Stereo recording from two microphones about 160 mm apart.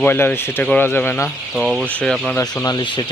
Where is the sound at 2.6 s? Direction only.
25° left (ahead or behind).